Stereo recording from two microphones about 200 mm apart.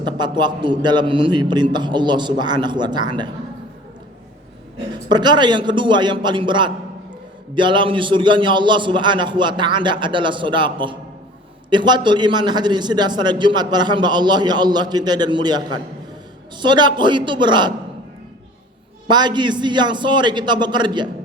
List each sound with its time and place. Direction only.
0.0 s a man's voice: 20° right (ahead or behind)
5.0 s a man's voice: 20° right (ahead or behind)
19.0 s a man's voice: 20° right (ahead or behind)